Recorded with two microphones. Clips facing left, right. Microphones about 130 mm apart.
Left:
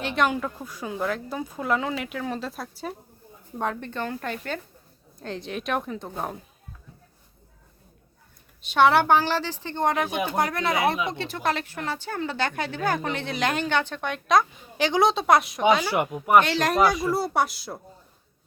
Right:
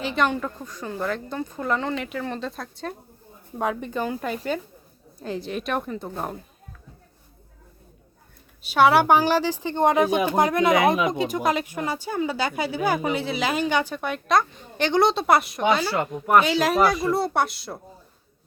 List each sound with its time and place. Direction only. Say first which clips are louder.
0.0 s speech: right 1 dB; centre (ahead or behind)
3.6 s speech: right 3 dB; 10° right (ahead or behind)
8.6 s speech: right 2 dB; 5° right (ahead or behind)
15.8 s speech: even; 15° left (ahead or behind)
16.4 s speech: right 1 dB; 5° right (ahead or behind)